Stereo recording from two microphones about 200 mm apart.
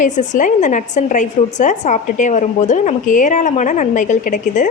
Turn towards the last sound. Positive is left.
turn(degrees=40)  # may be behind; listen again after turning